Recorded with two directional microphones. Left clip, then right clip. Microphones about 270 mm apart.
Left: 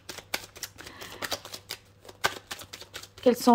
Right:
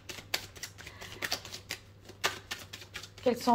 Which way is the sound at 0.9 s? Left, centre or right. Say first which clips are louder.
Left 2 dB; left.